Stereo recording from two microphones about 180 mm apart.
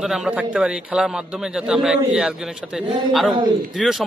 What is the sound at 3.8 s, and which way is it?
Speech, centre (ahead or behind).